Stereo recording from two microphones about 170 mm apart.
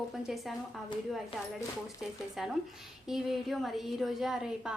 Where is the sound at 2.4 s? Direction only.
5° right (ahead or behind).